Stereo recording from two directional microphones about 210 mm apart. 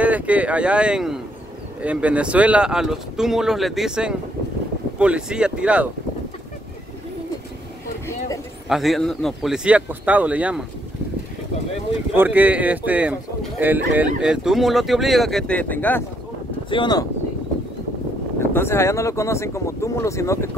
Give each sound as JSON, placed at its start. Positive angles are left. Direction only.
{"t": 0.0, "sound": "speech", "side_deg": -5}
{"t": 8.6, "sound": "speech", "side_deg": 0}
{"t": 12.2, "sound": "speech", "side_deg": -10}
{"t": 16.7, "sound": "speech", "side_deg": 20}
{"t": 18.4, "sound": "speech", "side_deg": 10}